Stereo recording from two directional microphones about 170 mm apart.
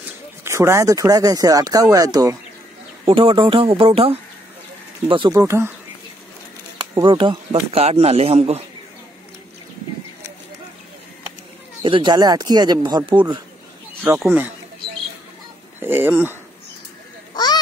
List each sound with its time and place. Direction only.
0.4 s speech: 15° right (ahead or behind)
3.1 s speech: 30° right (ahead or behind)
5.4 s speech: 15° right (ahead or behind)
6.8 s speech: 30° right (ahead or behind)
11.8 s speech: 30° right (ahead or behind)
15.8 s speech: 15° right (ahead or behind)
17.3 s a sound: 25° left (ahead or behind)